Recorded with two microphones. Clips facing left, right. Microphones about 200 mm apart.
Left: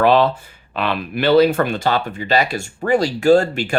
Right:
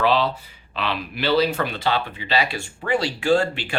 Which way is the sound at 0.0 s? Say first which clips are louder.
Left 6 dB; 50° left (ahead or behind).